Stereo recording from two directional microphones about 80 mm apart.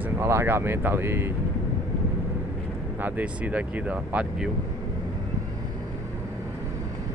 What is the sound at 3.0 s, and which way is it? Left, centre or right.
Speech, centre.